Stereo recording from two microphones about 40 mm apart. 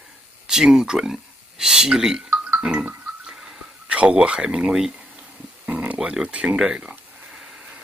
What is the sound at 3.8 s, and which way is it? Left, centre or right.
Speech, right.